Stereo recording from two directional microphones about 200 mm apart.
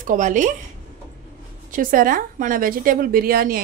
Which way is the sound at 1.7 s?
45° right (ahead or behind).